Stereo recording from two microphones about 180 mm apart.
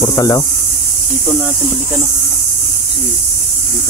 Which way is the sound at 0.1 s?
20° left (ahead or behind).